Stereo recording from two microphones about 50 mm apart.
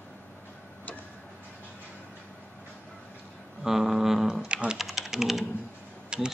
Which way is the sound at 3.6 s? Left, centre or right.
Centre.